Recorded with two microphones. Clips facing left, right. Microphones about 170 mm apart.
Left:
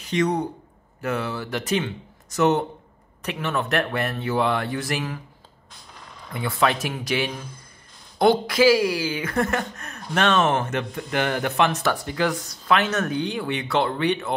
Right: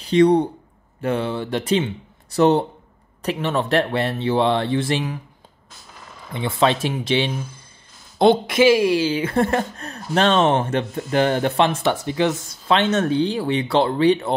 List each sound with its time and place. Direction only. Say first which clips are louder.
0.0 s speech: right 8 dB; 30° right (ahead or behind)
5.7 s a sound: right 2 dB; 5° right (ahead or behind)
6.3 s speech: right 3 dB; 25° right (ahead or behind)